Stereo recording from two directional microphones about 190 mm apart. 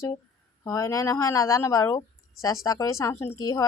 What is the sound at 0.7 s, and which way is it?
Speech, 15° left (ahead or behind).